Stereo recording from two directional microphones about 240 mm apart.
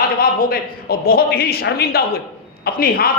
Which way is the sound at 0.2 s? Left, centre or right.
Left.